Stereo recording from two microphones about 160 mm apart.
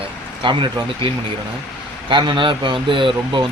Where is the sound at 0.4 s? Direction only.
30° right (ahead or behind).